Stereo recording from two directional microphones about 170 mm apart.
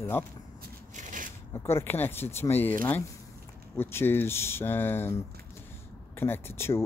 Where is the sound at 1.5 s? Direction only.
15° left (ahead or behind).